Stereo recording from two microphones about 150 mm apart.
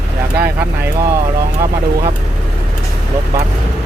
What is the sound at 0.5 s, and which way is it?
Speech, 10° right (ahead or behind).